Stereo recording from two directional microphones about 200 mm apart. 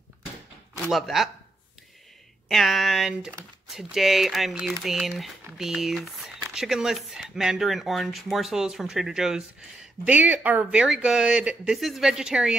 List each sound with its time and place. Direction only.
0.8 s speech: centre (ahead or behind)
2.4 s speech: centre (ahead or behind)